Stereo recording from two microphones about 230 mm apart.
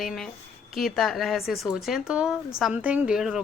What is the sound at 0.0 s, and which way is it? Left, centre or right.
A woman's voice, centre.